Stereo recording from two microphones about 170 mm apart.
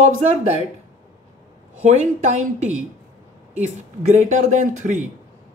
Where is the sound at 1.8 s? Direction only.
45° right (ahead or behind).